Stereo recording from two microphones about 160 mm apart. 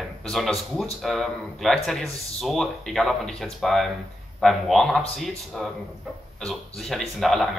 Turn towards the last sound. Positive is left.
turn(degrees=0)  # may be behind; listen again after turning